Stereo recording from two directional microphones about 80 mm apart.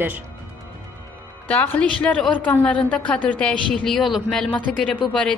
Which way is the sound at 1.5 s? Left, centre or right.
Left.